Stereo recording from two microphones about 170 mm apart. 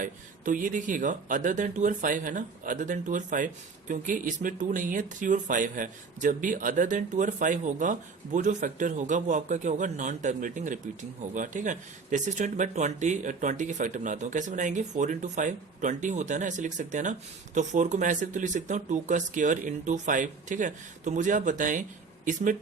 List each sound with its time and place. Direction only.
0.0 s speech: 50° right (ahead or behind)